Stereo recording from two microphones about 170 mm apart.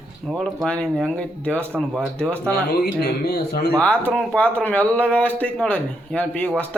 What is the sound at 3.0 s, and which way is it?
Speech, 65° left (ahead or behind).